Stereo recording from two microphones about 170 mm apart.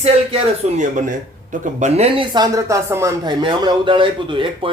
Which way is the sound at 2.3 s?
20° right (ahead or behind).